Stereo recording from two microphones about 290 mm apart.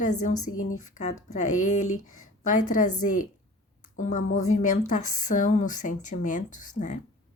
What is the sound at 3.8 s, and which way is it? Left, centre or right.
Speech, left.